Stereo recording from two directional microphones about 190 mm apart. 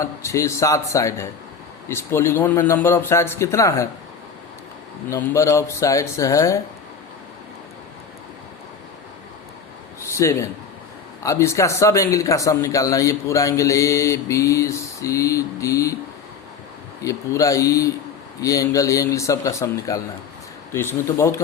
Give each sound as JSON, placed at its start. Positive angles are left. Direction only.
{"t": 0.0, "sound": "a man's voice", "side_deg": 15}
{"t": 5.0, "sound": "a man's voice", "side_deg": 15}
{"t": 10.0, "sound": "a man's voice", "side_deg": 15}
{"t": 17.0, "sound": "a man's voice", "side_deg": 15}